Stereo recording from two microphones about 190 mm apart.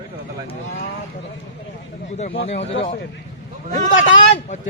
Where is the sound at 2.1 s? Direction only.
40° left (ahead or behind).